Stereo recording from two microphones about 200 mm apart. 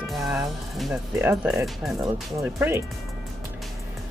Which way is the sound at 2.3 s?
10° right (ahead or behind).